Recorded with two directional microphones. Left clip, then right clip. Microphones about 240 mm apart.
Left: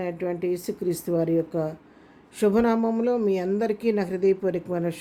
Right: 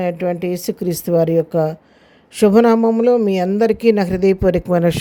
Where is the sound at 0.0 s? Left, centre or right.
Right.